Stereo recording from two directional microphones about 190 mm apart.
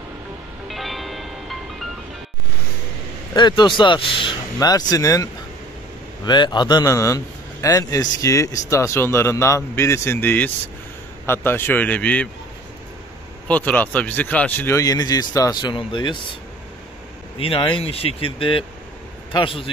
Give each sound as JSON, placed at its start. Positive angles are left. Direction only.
{"t": 0.7, "sound": "music", "side_deg": 0}
{"t": 3.3, "sound": "speech", "side_deg": 25}
{"t": 13.5, "sound": "speech", "side_deg": 10}
{"t": 17.4, "sound": "speech", "side_deg": 30}